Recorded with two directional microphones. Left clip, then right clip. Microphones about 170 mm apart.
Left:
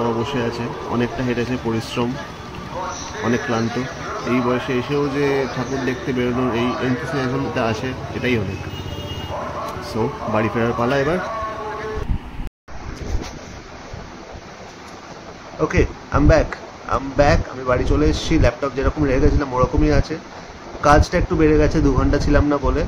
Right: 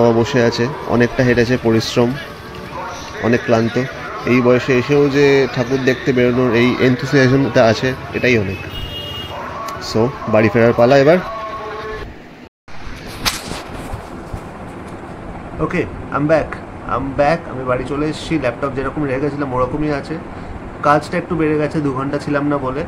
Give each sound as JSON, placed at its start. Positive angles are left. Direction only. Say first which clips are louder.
{"t": 0.0, "sound": "speech", "louder": "right 8 dB", "side_deg": -35}
{"t": 3.3, "sound": "speech", "louder": "right 6 dB", "side_deg": -30}
{"t": 9.9, "sound": "speech", "louder": "right 6 dB", "side_deg": -25}
{"t": 10.3, "sound": "speech", "louder": "right 9 dB", "side_deg": -35}
{"t": 15.6, "sound": "speech", "louder": "left 1 dB", "side_deg": 0}